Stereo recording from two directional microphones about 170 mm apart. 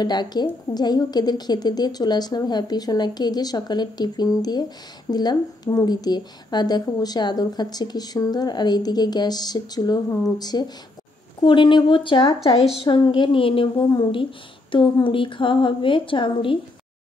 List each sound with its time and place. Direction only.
0.0 s a woman's voice: 25° left (ahead or behind)